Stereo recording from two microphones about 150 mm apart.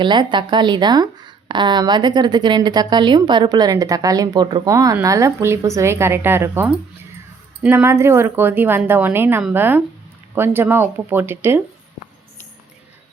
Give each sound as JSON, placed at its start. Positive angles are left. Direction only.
{"t": 0.0, "sound": "speech", "side_deg": -30}